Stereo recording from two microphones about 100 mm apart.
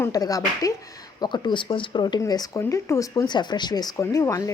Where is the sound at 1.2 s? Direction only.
50° left (ahead or behind); by 3.2 s 30° left (ahead or behind).